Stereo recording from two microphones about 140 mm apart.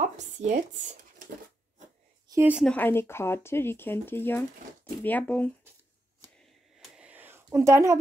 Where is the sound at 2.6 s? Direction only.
10° left (ahead or behind).